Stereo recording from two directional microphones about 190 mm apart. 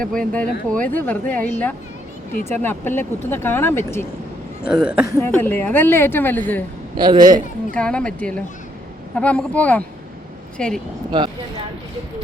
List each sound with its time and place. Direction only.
0.1 s a woman's voice: 5° left (ahead or behind)
4.6 s speech: 5° right (ahead or behind)
5.1 s a woman's voice: 10° left (ahead or behind)
6.9 s a man's voice: 25° right (ahead or behind)
7.7 s a woman's voice: 5° left (ahead or behind)
11.1 s a man's voice: 25° right (ahead or behind)